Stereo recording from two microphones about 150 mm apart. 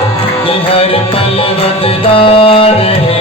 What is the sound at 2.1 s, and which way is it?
Music, 40° left (ahead or behind).